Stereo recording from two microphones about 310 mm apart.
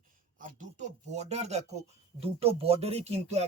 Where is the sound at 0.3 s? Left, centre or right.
Right.